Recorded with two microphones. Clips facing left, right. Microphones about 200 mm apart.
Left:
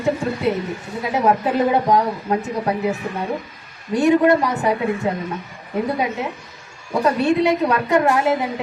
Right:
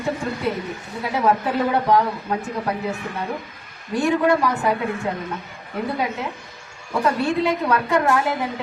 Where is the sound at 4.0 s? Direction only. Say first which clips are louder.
Left 4 dB; 20° left (ahead or behind).